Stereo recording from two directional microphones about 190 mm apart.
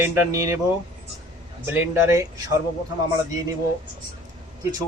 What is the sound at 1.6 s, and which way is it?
Speech, 10° right (ahead or behind).